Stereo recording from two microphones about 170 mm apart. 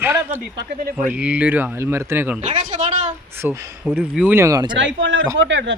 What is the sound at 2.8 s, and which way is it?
Speech, 45° right (ahead or behind).